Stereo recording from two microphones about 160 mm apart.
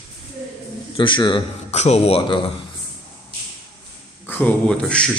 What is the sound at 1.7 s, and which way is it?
Speech, 40° left (ahead or behind).